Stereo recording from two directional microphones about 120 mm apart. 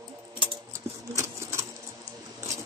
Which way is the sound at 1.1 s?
25° right (ahead or behind).